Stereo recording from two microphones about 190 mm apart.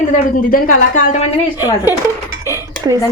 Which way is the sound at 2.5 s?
15° right (ahead or behind).